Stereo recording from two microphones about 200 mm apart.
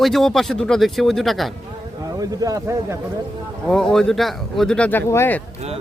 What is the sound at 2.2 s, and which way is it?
Speech, 15° right (ahead or behind).